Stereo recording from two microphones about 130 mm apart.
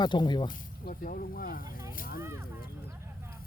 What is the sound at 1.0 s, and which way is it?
Speech, 90° left.